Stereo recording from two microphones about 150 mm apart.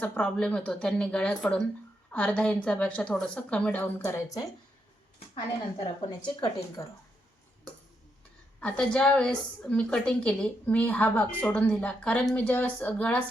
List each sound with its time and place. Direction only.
0.0 s a woman's voice: 10° left (ahead or behind)
5.8 s speech: 30° left (ahead or behind)
8.6 s a woman's voice: 5° left (ahead or behind)